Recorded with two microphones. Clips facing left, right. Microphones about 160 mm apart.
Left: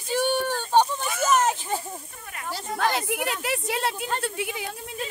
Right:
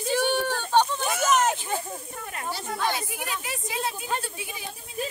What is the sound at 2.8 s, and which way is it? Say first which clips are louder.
Speech: left 6 dB; 80° left.